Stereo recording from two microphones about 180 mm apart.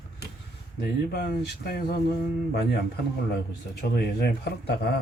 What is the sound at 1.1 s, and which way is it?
Speech, 60° left (ahead or behind).